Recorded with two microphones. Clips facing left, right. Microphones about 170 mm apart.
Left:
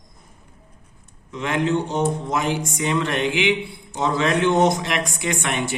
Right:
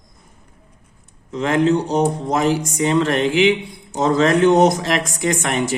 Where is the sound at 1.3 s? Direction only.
35° right (ahead or behind).